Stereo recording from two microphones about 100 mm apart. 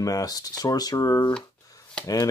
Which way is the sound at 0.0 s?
40° left (ahead or behind).